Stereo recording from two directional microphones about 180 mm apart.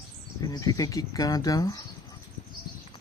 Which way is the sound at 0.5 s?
20° left (ahead or behind).